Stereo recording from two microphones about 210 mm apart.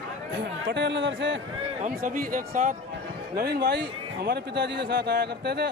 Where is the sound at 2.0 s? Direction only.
40° right (ahead or behind).